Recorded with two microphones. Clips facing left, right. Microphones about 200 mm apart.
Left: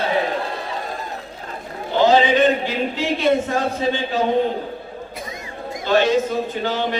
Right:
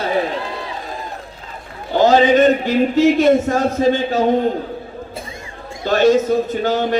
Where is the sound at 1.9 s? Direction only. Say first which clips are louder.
Right 3 dB; 45° right (ahead or behind).